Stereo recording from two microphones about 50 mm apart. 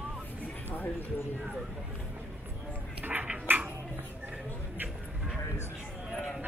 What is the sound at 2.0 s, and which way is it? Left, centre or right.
Run, right.